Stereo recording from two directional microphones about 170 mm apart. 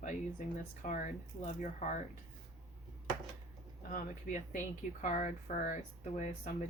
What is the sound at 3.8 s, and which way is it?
Speech, 55° left (ahead or behind).